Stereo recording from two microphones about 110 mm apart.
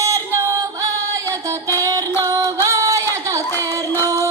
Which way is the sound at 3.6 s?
30° right (ahead or behind).